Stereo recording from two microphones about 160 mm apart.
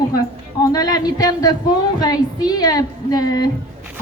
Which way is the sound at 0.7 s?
25° left (ahead or behind).